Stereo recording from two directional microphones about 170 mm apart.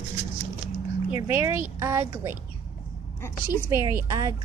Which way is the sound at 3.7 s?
20° right (ahead or behind).